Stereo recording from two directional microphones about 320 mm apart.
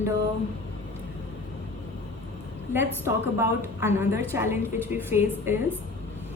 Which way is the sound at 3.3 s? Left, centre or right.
Centre.